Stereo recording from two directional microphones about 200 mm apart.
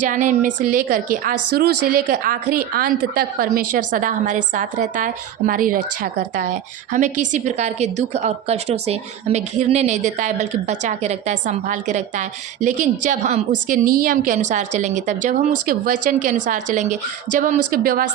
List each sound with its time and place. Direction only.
0.0 s a woman's voice: 40° right (ahead or behind)